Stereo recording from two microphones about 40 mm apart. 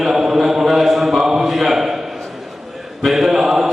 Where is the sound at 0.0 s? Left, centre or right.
Centre.